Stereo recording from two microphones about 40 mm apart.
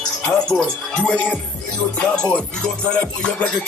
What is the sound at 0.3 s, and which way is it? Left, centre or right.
Speech, centre.